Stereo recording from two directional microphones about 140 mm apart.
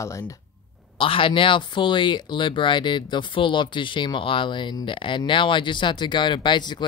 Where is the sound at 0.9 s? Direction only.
40° left (ahead or behind).